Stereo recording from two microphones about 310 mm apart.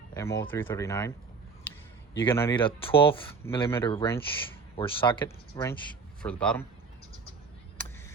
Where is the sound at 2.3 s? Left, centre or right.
Centre.